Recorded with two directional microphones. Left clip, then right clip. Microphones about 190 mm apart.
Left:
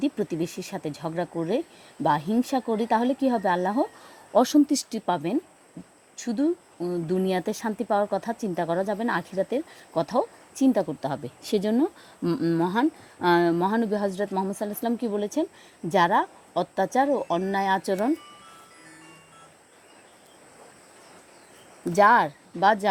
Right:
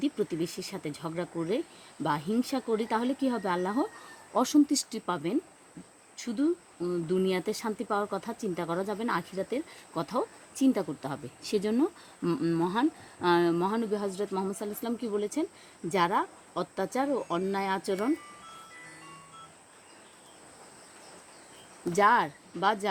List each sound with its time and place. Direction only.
0.0 s speech: 30° left (ahead or behind)
21.9 s speech: 35° left (ahead or behind)